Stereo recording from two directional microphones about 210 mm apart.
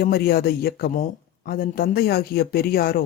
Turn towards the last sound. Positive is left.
turn(degrees=45)  # may be behind; listen again after turning